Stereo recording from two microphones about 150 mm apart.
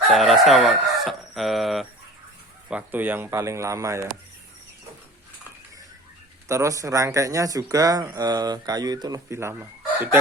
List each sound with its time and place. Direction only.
0.1 s chicken: centre (ahead or behind)
2.6 s speech: 10° right (ahead or behind)
6.5 s speech: 20° right (ahead or behind)